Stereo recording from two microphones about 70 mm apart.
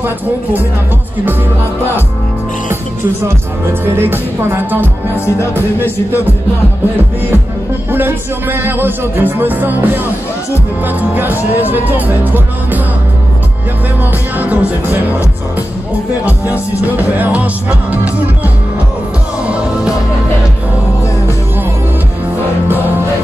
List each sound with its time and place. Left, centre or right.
3.8 s music: right
5.1 s music: left
7.9 s speech: right
10.9 s speech: right
14.4 s speech: right
16.8 s speech: right
19.4 s music: centre